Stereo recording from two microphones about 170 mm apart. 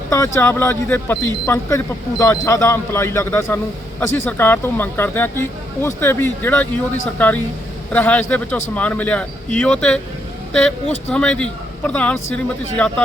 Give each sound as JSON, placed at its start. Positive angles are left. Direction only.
{"t": 0.1, "sound": "speech", "side_deg": 15}